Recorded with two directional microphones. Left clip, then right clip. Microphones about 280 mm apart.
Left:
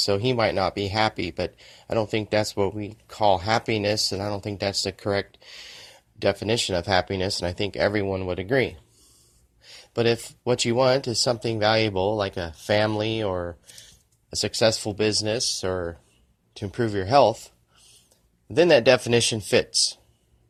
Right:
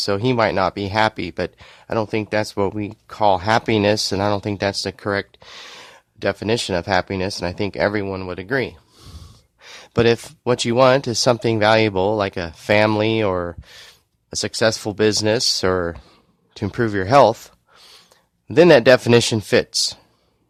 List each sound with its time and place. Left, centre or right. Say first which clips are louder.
0.0 s speech: right 4 dB; centre
9.8 s speech: right 6 dB; right
12.9 s speech: right 8 dB; right
13.2 s speech: right 6 dB; right
18.8 s speech: right 6 dB; right